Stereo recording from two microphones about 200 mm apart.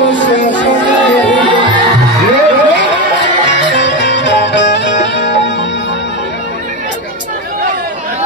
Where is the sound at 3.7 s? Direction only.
60° left (ahead or behind).